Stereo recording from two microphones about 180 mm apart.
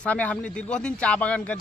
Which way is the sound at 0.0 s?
10° left (ahead or behind).